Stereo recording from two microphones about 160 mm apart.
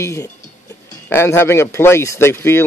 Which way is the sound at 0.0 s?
20° left (ahead or behind).